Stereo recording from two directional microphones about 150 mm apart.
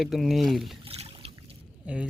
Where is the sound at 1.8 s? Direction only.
10° right (ahead or behind).